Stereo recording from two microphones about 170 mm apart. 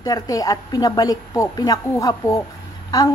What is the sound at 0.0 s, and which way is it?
Speech, 20° left (ahead or behind).